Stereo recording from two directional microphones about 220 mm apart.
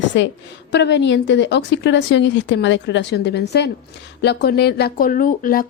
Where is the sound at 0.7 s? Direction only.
50° left (ahead or behind).